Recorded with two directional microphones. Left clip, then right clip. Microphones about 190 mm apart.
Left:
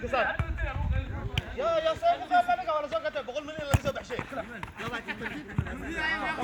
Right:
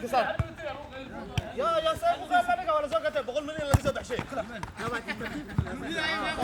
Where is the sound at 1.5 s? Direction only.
65° right (ahead or behind).